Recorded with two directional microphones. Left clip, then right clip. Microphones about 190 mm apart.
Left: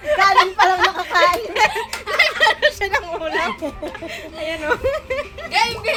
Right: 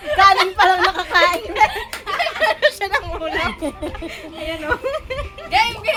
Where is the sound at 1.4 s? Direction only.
Centre (ahead or behind).